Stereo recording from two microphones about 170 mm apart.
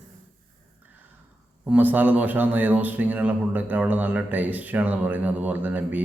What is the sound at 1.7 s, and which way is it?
Speech, 10° right (ahead or behind).